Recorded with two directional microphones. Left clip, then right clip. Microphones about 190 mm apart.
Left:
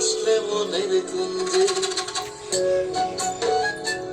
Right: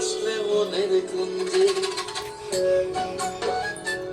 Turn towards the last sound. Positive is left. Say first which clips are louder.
# left 3 dB
turn(degrees=25)  # may be behind; listen again after turning